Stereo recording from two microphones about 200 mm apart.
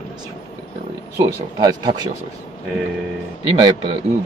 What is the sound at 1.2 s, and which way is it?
Speech, 20° right (ahead or behind).